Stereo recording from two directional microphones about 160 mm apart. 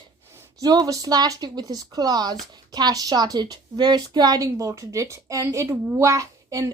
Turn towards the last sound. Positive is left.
turn(degrees=-20)  # may be behind; listen again after turning